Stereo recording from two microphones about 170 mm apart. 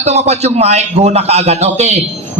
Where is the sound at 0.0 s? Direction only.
40° right (ahead or behind).